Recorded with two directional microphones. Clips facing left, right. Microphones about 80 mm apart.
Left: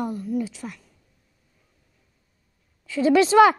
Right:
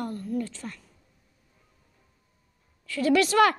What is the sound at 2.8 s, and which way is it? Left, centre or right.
Speech, left.